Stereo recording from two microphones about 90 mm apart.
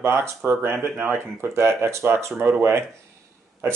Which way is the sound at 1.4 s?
30° right (ahead or behind).